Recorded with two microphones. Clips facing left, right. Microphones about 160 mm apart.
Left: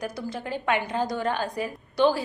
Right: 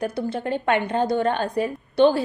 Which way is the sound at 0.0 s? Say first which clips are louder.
Right 6 dB; 30° right (ahead or behind).